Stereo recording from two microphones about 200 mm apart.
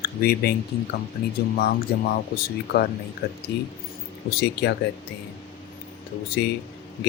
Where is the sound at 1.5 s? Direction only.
50° left (ahead or behind).